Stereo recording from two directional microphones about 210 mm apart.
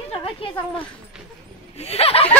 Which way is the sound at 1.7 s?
30° left (ahead or behind).